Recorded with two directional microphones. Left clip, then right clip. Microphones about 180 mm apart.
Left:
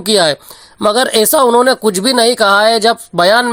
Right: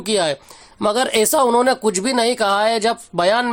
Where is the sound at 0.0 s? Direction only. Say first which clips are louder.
Left 7 dB; 30° left (ahead or behind).